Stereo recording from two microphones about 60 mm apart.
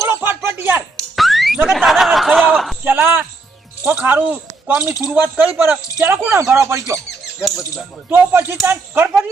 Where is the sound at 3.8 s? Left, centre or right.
Right.